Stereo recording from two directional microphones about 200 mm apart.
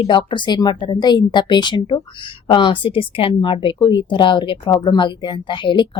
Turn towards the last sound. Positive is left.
turn(degrees=25)  # may be behind; listen again after turning